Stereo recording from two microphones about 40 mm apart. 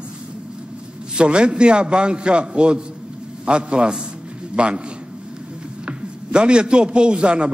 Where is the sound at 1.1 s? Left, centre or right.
Right.